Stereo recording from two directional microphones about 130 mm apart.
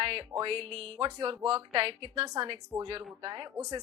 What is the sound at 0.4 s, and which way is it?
A woman's voice, 45° right (ahead or behind).